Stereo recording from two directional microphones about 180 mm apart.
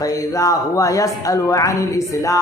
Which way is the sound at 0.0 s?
20° left (ahead or behind).